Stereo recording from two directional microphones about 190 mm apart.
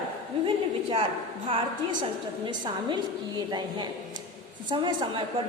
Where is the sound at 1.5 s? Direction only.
25° right (ahead or behind).